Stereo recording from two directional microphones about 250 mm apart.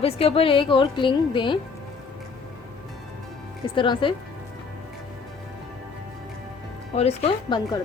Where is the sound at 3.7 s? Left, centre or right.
Centre.